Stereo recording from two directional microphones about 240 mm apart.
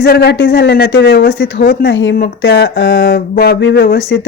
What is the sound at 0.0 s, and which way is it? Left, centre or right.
Speech, left.